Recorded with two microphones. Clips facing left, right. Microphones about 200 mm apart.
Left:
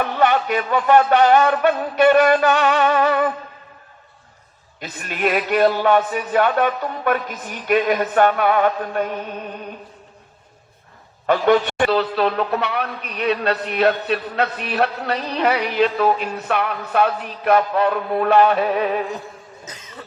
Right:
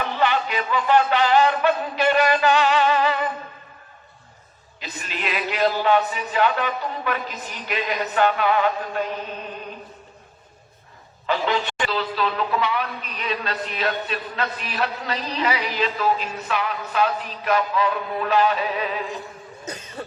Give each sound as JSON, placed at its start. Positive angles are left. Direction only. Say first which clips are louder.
{"t": 0.0, "sound": "a man's voice", "louder": "left 4 dB", "side_deg": 50}
{"t": 4.8, "sound": "a man's voice", "louder": "left 8 dB", "side_deg": 50}
{"t": 11.3, "sound": "a woman's voice", "louder": "left 7 dB", "side_deg": 55}
{"t": 19.6, "sound": "cough", "louder": "right 7 dB", "side_deg": -30}